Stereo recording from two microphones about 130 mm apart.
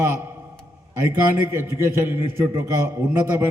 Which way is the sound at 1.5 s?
20° right (ahead or behind).